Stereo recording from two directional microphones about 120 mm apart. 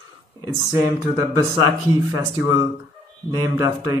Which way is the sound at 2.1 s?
30° right (ahead or behind).